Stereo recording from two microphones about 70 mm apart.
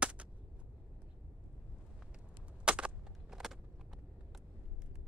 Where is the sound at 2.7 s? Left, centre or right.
Centre.